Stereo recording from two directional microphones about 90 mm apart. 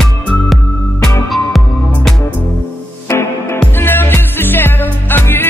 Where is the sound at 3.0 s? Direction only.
30° left (ahead or behind).